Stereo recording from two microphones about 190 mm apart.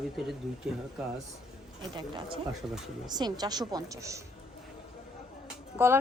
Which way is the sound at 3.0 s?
20° right (ahead or behind).